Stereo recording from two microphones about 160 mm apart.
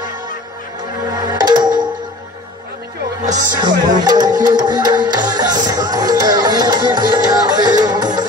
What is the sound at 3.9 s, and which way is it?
Music, 25° right (ahead or behind).